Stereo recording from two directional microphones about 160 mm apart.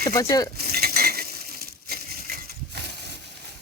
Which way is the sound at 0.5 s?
75° right (ahead or behind).